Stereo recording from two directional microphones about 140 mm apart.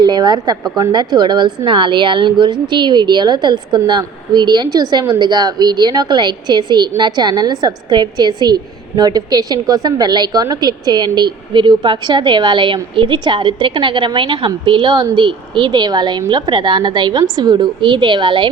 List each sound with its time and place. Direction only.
0.0 s a woman's voice: 30° right (ahead or behind)